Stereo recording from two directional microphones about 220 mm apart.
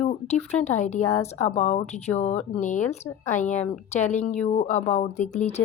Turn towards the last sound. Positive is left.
turn(degrees=30)  # may be behind; listen again after turning